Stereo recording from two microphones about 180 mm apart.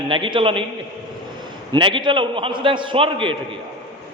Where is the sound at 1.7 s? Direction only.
25° right (ahead or behind).